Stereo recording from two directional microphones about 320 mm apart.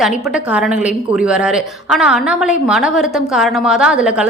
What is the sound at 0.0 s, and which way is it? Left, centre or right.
A woman's voice, centre.